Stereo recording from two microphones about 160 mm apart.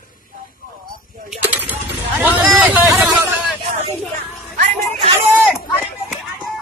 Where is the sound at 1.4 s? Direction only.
10° right (ahead or behind).